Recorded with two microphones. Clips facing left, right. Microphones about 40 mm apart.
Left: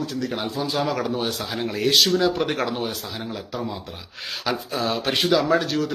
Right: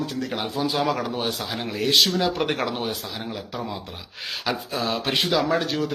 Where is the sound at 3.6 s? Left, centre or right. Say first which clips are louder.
Left 1 dB; centre.